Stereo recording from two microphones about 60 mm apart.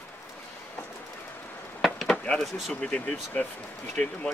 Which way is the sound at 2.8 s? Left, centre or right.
Centre.